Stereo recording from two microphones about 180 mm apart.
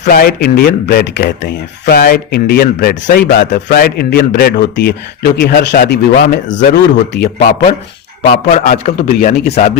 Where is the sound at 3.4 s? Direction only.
45° left (ahead or behind); by 7.3 s 70° left (ahead or behind).